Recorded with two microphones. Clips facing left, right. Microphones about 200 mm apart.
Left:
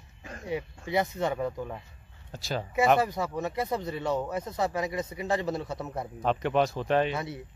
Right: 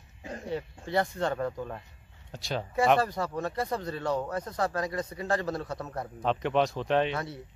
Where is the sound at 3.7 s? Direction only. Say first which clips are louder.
Left 1 dB; 20° left (ahead or behind).